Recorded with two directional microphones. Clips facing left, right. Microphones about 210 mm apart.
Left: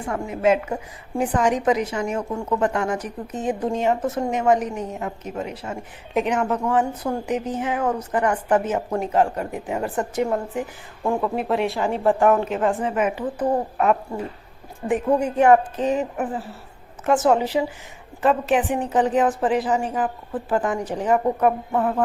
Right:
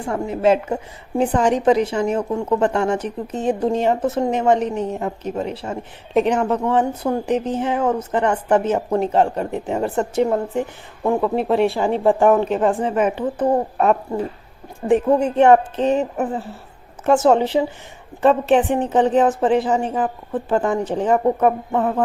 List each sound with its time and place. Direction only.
0.1 s a woman's voice: 30° right (ahead or behind)